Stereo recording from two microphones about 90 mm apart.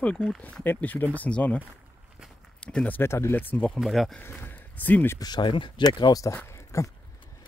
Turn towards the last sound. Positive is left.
turn(degrees=35)  # may be behind; listen again after turning